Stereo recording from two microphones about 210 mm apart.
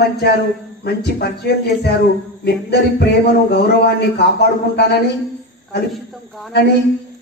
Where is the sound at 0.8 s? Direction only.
50° left (ahead or behind).